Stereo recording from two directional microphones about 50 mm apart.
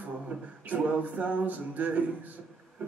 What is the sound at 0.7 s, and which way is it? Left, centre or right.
Music, right.